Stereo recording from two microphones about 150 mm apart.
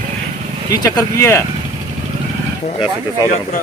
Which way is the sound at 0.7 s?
25° left (ahead or behind).